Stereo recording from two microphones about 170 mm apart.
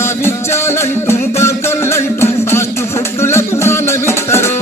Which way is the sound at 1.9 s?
15° left (ahead or behind).